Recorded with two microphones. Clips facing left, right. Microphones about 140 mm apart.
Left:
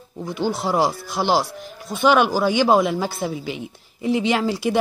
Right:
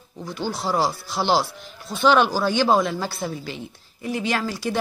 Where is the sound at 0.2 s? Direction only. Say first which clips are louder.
Left 4 dB; 20° left (ahead or behind).